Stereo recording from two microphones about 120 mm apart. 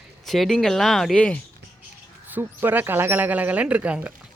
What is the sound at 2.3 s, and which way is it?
Speech, 15° right (ahead or behind).